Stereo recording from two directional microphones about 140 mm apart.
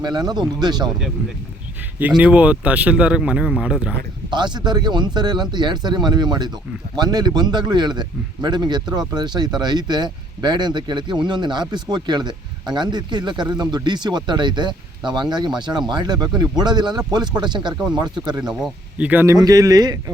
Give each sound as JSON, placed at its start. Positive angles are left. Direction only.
{"t": 0.0, "sound": "speech", "side_deg": -30}
{"t": 2.0, "sound": "speech", "side_deg": -10}
{"t": 4.3, "sound": "speech", "side_deg": -30}
{"t": 18.4, "sound": "speech", "side_deg": -5}